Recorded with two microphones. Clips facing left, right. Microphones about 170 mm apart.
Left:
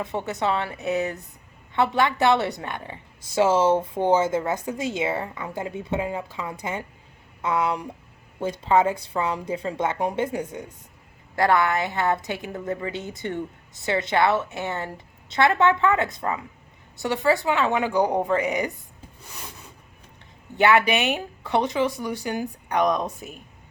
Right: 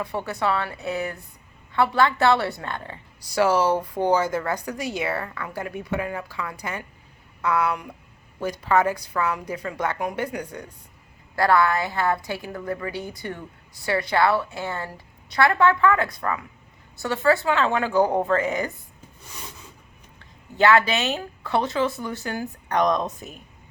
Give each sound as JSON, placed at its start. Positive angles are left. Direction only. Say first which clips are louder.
{"t": 0.0, "sound": "a woman's voice", "louder": "even", "side_deg": 20}
{"t": 20.6, "sound": "speech", "louder": "even", "side_deg": 15}